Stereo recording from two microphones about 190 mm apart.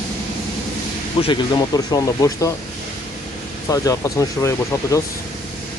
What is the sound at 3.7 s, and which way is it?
Speech, 15° left (ahead or behind).